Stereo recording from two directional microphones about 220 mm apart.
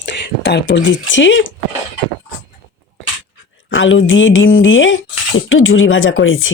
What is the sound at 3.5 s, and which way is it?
Speech, 60° left (ahead or behind).